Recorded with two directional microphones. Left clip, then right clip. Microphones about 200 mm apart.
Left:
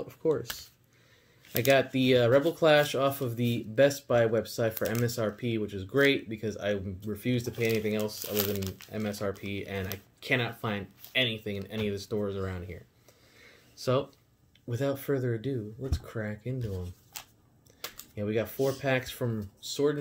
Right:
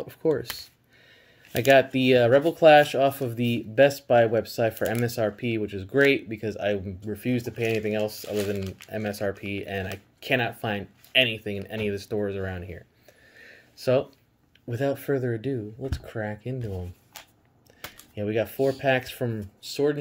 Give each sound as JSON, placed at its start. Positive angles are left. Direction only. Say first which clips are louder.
{"t": 0.1, "sound": "speech", "louder": "right 4 dB", "side_deg": -35}
{"t": 1.7, "sound": "speech", "louder": "right 6 dB", "side_deg": -30}
{"t": 8.5, "sound": "speech", "louder": "right 3 dB", "side_deg": 5}
{"t": 8.9, "sound": "speech", "louder": "right 5 dB", "side_deg": -30}
{"t": 13.4, "sound": "a sound", "louder": "right 3 dB", "side_deg": -25}
{"t": 14.7, "sound": "speech", "louder": "right 4 dB", "side_deg": -30}
{"t": 18.1, "sound": "speech", "louder": "right 4 dB", "side_deg": -30}